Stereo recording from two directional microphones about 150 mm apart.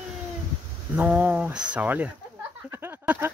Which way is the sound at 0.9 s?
10° right (ahead or behind).